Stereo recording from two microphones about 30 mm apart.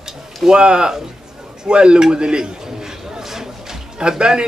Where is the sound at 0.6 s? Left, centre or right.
Right.